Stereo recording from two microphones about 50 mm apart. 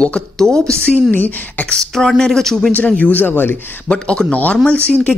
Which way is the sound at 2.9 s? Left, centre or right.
Left.